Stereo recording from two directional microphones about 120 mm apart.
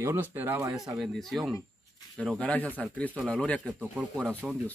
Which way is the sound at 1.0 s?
Centre (ahead or behind).